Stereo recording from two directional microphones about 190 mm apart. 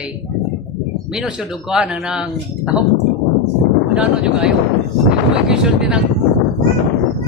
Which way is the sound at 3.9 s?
5° right (ahead or behind).